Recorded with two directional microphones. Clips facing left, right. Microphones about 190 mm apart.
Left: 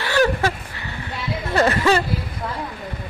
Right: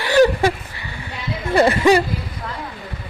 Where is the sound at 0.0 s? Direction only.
15° right (ahead or behind).